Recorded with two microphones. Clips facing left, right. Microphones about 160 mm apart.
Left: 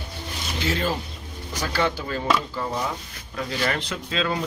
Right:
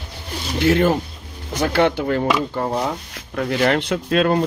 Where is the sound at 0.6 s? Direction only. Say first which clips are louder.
Right 10 dB; 55° right (ahead or behind).